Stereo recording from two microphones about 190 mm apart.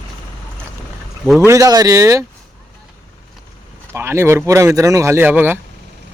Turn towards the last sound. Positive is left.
turn(degrees=-10)  # may be behind; listen again after turning